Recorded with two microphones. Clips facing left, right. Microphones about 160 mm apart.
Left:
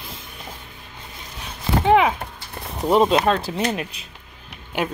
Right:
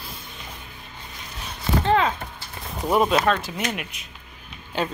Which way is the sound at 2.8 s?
25° left (ahead or behind).